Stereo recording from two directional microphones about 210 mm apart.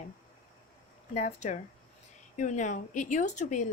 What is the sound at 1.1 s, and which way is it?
A woman's voice, 35° left (ahead or behind).